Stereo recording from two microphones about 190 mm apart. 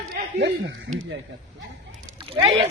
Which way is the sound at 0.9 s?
70° right (ahead or behind).